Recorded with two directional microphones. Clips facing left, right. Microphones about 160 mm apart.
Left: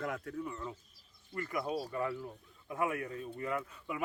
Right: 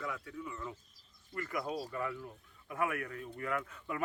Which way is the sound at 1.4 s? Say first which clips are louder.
Left 2 dB; 25° left (ahead or behind).